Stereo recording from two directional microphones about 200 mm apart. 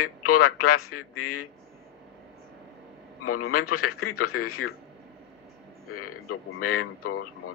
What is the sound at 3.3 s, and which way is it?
Speech, 90° left.